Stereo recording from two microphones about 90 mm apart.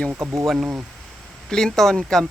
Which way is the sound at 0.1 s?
30° right (ahead or behind).